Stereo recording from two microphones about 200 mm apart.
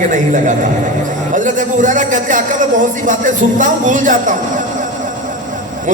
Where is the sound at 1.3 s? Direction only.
40° right (ahead or behind).